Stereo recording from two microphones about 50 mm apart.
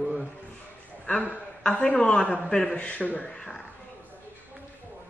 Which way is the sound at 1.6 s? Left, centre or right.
Centre.